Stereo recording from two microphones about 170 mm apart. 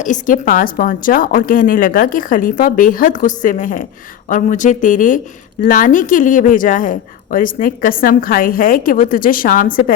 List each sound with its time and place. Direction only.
0.0 s a woman's voice: 50° left (ahead or behind)